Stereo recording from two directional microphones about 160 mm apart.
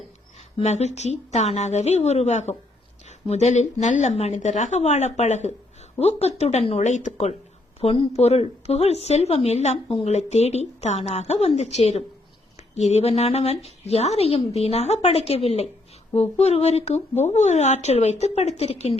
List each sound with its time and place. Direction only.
0.3 s a woman's voice: 45° left (ahead or behind)